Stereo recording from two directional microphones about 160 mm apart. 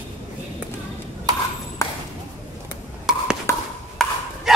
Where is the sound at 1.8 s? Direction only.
20° left (ahead or behind).